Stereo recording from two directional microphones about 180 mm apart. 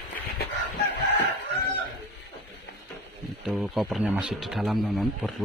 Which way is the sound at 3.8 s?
5° right (ahead or behind).